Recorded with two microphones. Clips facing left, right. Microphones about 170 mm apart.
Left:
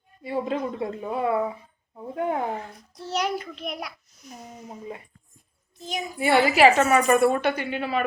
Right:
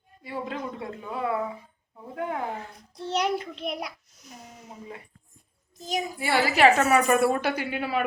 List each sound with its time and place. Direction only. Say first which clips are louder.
0.2 s a woman's voice: left 6 dB; 25° left (ahead or behind)
3.1 s a child's voice: right 1 dB; 25° right (ahead or behind)
6.1 s a woman's voice: left 6 dB; 20° left (ahead or behind)
6.6 s a woman's voice: right 1 dB; centre (ahead or behind)